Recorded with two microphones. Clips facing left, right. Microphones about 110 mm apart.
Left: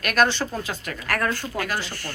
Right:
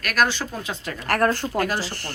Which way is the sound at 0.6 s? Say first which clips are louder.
Even; 20° right (ahead or behind).